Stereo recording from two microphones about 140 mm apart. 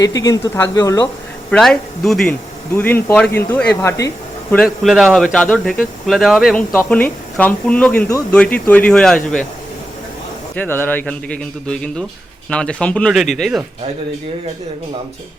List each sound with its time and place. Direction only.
0.0 s speech: 25° left (ahead or behind)
1.5 s speech: 5° left (ahead or behind)
2.7 s a man's voice: 15° left (ahead or behind)
4.5 s speech: centre (ahead or behind)
6.7 s a man's voice: 10° left (ahead or behind)
10.5 s a man's voice: 10° left (ahead or behind)